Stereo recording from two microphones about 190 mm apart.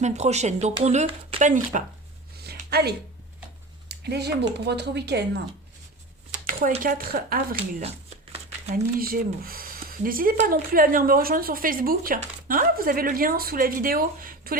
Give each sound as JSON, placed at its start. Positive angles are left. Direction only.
{"t": 0.0, "sound": "speech", "side_deg": -35}
{"t": 2.4, "sound": "a sound", "side_deg": -55}
{"t": 3.8, "sound": "speech", "side_deg": -60}
{"t": 6.5, "sound": "speech", "side_deg": -45}
{"t": 7.8, "sound": "shuffling cards", "side_deg": -35}
{"t": 8.7, "sound": "speech", "side_deg": -50}